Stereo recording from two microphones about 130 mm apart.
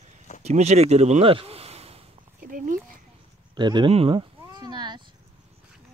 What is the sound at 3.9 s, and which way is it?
Cat, 45° right (ahead or behind).